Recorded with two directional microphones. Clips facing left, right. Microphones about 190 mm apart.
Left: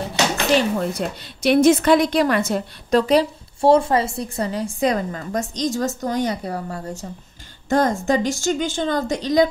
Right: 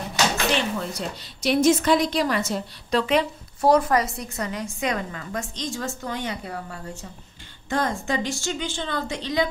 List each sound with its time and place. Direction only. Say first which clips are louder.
0.6 s a woman's voice: left 6 dB; 50° left (ahead or behind)